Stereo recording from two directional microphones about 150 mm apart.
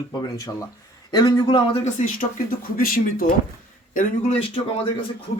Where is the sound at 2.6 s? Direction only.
70° left (ahead or behind).